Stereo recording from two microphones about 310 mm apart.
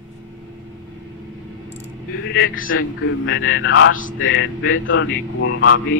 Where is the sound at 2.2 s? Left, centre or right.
Left.